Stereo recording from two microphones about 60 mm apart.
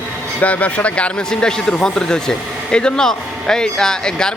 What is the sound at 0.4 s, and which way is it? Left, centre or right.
Speech, left.